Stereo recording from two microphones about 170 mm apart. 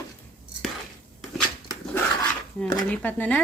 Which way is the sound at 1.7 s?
20° left (ahead or behind).